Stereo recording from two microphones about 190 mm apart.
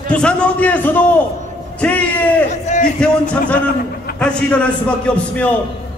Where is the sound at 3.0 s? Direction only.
5° left (ahead or behind).